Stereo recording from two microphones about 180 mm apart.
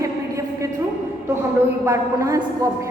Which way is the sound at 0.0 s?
15° right (ahead or behind).